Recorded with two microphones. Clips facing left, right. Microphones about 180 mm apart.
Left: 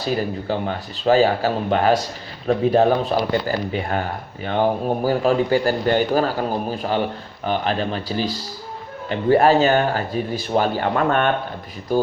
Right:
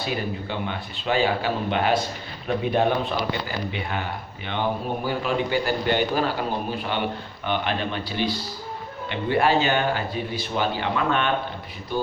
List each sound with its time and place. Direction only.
0.0 s speech: 40° left (ahead or behind)